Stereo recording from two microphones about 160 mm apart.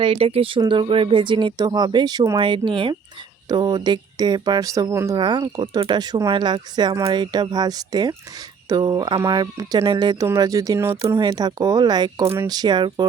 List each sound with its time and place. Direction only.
0.0 s speech: 35° right (ahead or behind)